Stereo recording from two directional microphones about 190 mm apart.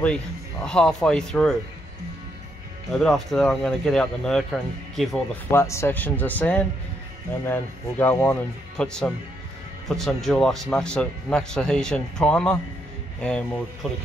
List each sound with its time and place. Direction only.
0.0 s speech: 5° left (ahead or behind)
2.9 s speech: centre (ahead or behind)
5.5 s speech: 15° left (ahead or behind)
8.0 s speech: 10° left (ahead or behind)